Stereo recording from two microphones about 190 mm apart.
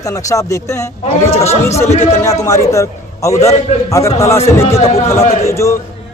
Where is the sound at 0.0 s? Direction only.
15° left (ahead or behind).